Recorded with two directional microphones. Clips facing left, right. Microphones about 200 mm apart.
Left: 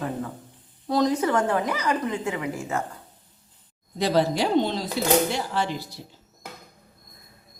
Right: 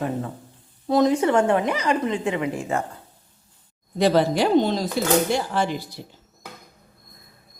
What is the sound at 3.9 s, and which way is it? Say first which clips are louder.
Speech: right 3 dB; 60° right (ahead or behind).